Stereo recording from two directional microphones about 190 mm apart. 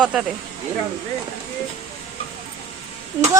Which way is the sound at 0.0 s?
5° right (ahead or behind).